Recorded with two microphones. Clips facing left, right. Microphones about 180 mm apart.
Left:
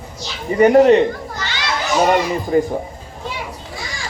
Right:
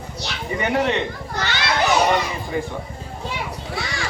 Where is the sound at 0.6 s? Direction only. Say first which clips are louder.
Left 12 dB; 40° left (ahead or behind).